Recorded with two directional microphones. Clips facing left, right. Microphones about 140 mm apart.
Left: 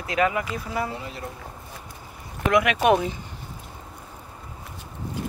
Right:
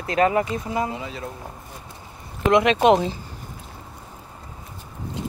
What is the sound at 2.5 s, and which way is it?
Speech, 25° right (ahead or behind).